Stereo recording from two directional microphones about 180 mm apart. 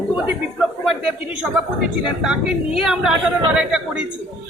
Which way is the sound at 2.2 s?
5° right (ahead or behind).